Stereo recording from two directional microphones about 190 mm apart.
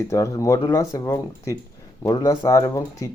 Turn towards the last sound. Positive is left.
turn(degrees=20)  # may be behind; listen again after turning